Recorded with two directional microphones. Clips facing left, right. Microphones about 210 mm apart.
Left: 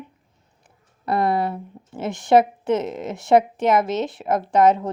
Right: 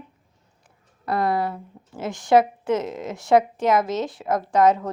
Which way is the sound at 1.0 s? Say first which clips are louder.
Left 2 dB; 25° left (ahead or behind).